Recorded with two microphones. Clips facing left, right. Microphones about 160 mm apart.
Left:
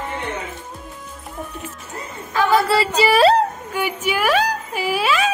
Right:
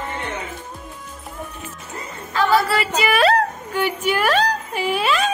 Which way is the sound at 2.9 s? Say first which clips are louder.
Left 3 dB; 35° left (ahead or behind).